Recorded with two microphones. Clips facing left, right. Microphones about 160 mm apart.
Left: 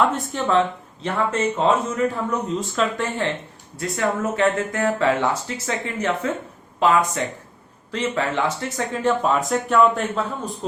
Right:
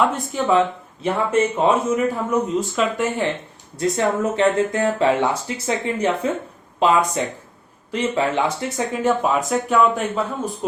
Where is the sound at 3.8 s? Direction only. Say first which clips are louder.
Right 4 dB; 20° right (ahead or behind).